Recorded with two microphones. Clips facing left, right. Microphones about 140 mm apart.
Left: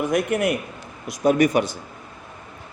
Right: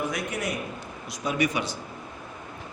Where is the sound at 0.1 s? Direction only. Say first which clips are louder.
Left 9 dB; 55° left (ahead or behind).